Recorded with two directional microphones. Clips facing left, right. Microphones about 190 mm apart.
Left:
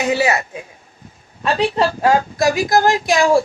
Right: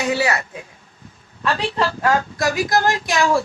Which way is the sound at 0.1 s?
20° left (ahead or behind).